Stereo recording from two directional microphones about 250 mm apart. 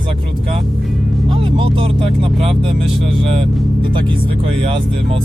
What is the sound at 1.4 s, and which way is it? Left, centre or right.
Music, right.